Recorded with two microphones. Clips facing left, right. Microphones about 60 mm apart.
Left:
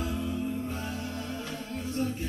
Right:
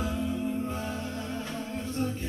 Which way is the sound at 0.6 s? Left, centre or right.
Right.